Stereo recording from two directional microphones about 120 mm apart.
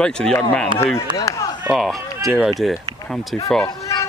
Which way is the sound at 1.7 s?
Centre (ahead or behind).